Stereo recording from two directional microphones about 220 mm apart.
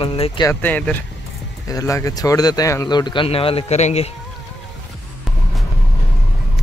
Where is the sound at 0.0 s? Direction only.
25° left (ahead or behind).